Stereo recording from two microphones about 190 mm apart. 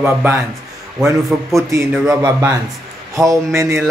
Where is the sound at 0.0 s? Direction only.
10° right (ahead or behind).